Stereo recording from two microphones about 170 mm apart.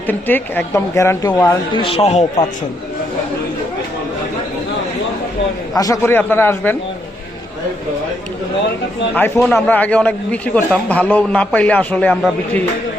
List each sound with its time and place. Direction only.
0.1 s speech: 10° left (ahead or behind); by 2.2 s 40° left (ahead or behind)
5.7 s a man's voice: 20° left (ahead or behind)
9.1 s a man's voice: 10° left (ahead or behind)